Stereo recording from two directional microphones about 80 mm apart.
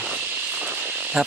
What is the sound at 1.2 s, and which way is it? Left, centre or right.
Speech, centre.